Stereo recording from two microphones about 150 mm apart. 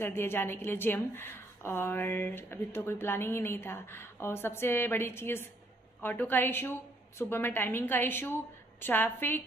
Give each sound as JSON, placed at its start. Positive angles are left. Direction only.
{"t": 0.0, "sound": "a woman's voice", "side_deg": 15}